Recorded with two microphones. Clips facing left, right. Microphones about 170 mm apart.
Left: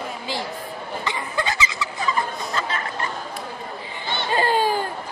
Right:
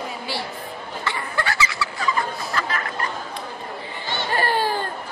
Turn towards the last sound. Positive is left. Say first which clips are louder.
# left 2 dB
turn(degrees=15)  # may be behind; listen again after turning